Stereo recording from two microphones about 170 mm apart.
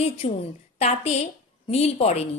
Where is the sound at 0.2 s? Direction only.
35° left (ahead or behind).